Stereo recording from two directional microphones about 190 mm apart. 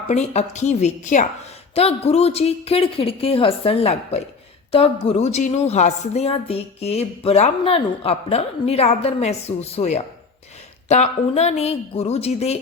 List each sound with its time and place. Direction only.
0.1 s a woman's voice: 35° left (ahead or behind)